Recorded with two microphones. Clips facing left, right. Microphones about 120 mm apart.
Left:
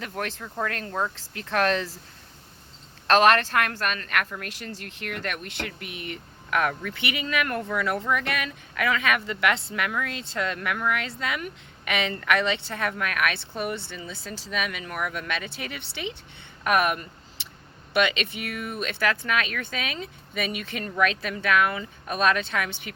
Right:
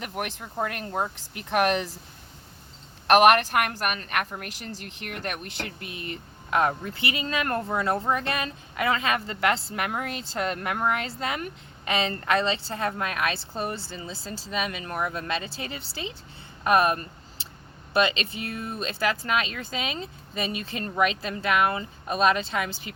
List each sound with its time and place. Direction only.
0.0 s speech: 20° right (ahead or behind)
3.1 s speech: 20° right (ahead or behind)
16.6 s a sound: 30° right (ahead or behind)
17.9 s speech: 35° right (ahead or behind)
18.5 s speech: 90° left
18.8 s speech: 30° right (ahead or behind)